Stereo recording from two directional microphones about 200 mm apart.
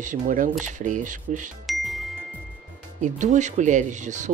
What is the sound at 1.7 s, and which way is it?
Music, centre (ahead or behind).